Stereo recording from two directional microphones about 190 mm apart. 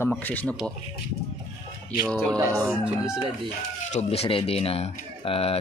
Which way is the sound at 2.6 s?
5° right (ahead or behind).